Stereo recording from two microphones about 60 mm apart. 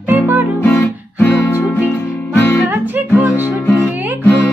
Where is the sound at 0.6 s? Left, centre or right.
Left.